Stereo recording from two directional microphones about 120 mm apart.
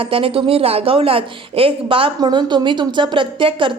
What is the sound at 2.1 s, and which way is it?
A woman's voice, 40° right (ahead or behind).